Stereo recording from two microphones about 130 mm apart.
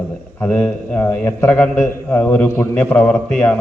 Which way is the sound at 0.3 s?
10° left (ahead or behind).